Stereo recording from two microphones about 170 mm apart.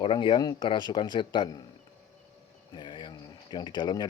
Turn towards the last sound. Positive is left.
turn(degrees=25)  # may be behind; listen again after turning